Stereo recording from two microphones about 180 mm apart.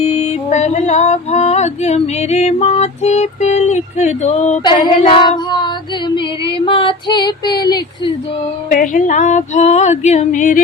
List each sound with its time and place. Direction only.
0.0 s music: 40° left (ahead or behind)
4.6 s female singing: 25° left (ahead or behind)
8.7 s female singing: 45° left (ahead or behind)